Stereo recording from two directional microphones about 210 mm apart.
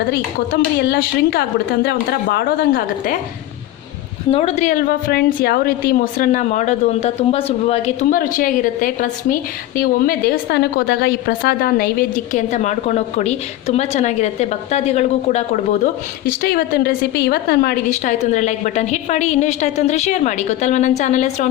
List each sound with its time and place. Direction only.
0.1 s a woman's voice: 50° left (ahead or behind)
4.3 s a woman's voice: 30° left (ahead or behind)
16.4 s a woman's voice: 45° left (ahead or behind)
17.8 s a woman's voice: 35° left (ahead or behind)